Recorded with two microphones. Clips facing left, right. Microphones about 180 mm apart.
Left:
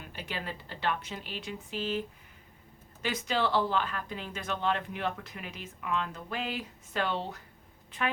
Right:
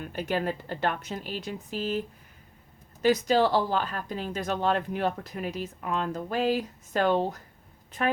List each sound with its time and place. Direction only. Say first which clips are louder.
0.0 s speech: right 10 dB; 45° right (ahead or behind)